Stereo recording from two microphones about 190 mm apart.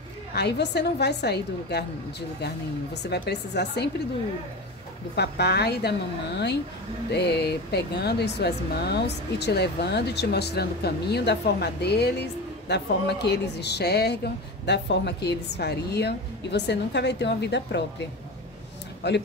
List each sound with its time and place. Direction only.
0.3 s speech: 60° left (ahead or behind)
5.1 s speech: 60° left (ahead or behind)
19.0 s speech: 65° left (ahead or behind)